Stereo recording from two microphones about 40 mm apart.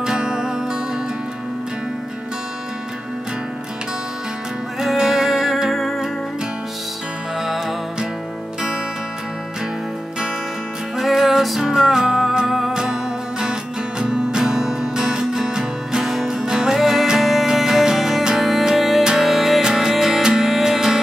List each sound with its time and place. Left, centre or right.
0.0 s music: centre
4.7 s music: centre
7.4 s music: centre
11.0 s music: centre
12.7 s music: centre